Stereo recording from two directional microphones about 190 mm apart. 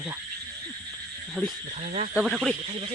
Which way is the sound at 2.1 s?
5° right (ahead or behind).